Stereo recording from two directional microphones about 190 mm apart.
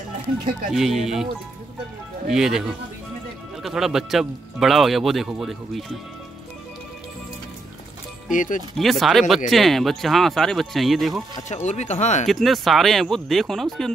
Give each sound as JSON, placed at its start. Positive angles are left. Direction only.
{"t": 0.7, "sound": "speech", "side_deg": 0}
{"t": 8.3, "sound": "speech", "side_deg": 45}
{"t": 8.7, "sound": "speech", "side_deg": 0}
{"t": 11.4, "sound": "speech", "side_deg": 35}
{"t": 12.3, "sound": "speech", "side_deg": 0}